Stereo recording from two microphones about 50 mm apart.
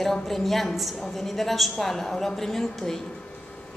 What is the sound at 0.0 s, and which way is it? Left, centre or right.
A woman's voice, centre.